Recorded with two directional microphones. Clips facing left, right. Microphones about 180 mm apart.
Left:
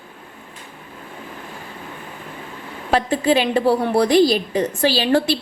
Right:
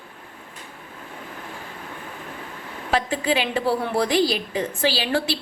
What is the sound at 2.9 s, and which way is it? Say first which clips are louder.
A woman's voice: left 5 dB; 40° left (ahead or behind).